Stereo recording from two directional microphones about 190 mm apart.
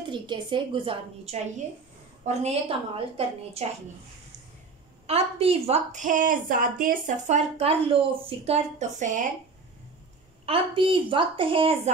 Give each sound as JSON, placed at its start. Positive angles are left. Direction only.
{"t": 0.0, "sound": "a woman's voice", "side_deg": -25}
{"t": 5.0, "sound": "a woman's voice", "side_deg": -30}
{"t": 10.4, "sound": "a woman's voice", "side_deg": -30}